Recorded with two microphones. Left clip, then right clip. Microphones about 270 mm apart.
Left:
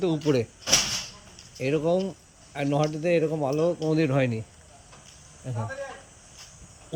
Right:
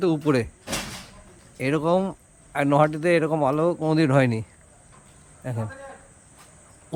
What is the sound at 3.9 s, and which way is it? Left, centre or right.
Speech, centre.